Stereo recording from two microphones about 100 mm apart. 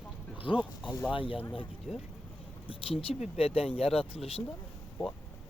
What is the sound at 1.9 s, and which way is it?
Speech, 5° right (ahead or behind).